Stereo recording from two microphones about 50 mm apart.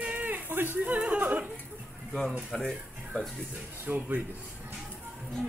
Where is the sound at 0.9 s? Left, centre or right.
Right.